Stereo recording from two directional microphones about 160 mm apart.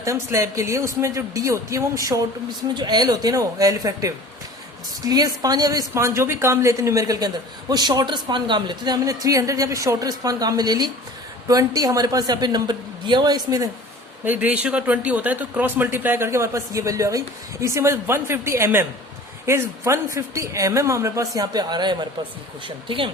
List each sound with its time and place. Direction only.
0.0 s a woman's voice: 20° right (ahead or behind)
14.3 s a woman's voice: 10° right (ahead or behind); by 23.1 s 30° right (ahead or behind)